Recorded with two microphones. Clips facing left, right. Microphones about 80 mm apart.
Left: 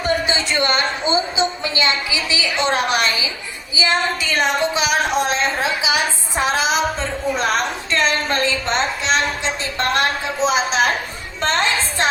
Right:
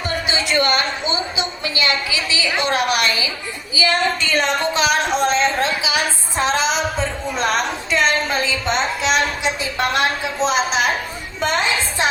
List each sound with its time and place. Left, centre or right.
0.3 s a woman's voice: left
4.2 s a woman's voice: centre
4.9 s a sound: centre
5.8 s music: left
6.4 s a woman's voice: centre
9.7 s a woman's voice: centre
10.4 s a woman's voice: centre